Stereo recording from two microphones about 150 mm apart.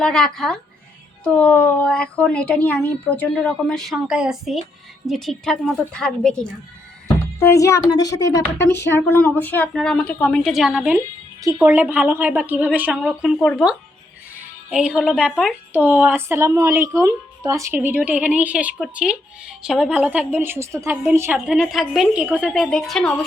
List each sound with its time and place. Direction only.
0.0 s a woman's voice: 5° left (ahead or behind)
7.3 s speech: 20° left (ahead or behind); by 10.9 s centre (ahead or behind)
10.9 s music: 25° right (ahead or behind)
11.6 s a woman's voice: 10° right (ahead or behind)
14.7 s a woman's voice: 5° right (ahead or behind)